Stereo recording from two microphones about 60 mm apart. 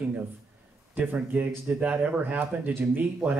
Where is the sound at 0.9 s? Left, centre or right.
Right.